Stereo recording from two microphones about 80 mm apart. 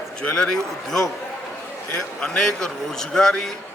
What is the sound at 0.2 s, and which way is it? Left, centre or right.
Speech, centre.